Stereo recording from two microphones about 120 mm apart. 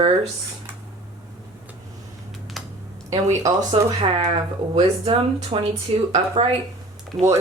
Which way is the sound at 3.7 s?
50° right (ahead or behind).